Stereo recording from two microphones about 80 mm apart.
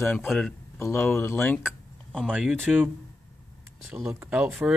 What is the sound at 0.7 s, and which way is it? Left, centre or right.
Speech, left.